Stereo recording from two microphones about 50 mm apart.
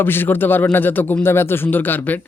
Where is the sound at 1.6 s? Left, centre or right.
Left.